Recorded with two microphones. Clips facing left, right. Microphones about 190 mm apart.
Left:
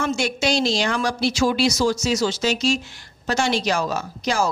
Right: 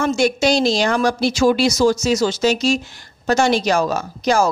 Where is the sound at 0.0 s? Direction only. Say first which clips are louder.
Right 6 dB; 40° right (ahead or behind).